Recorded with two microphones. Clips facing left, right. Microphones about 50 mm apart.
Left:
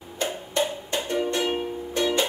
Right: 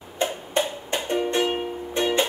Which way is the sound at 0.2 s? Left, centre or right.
Right.